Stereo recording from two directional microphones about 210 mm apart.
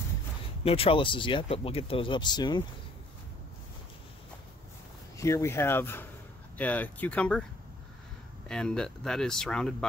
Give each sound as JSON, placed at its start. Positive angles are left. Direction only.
{"t": 0.7, "sound": "speech", "side_deg": 25}
{"t": 5.1, "sound": "speech", "side_deg": 15}
{"t": 8.5, "sound": "speech", "side_deg": 5}